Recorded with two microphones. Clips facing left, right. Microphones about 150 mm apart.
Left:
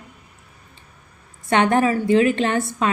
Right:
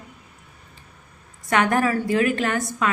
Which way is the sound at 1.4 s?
25° left (ahead or behind).